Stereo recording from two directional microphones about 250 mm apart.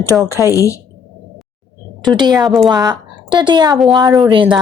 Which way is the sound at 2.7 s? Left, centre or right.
Centre.